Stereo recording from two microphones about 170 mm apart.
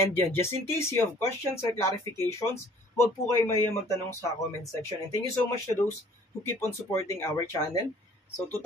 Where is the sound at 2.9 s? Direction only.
15° left (ahead or behind).